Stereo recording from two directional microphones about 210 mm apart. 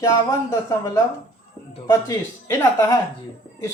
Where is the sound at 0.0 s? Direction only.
15° left (ahead or behind).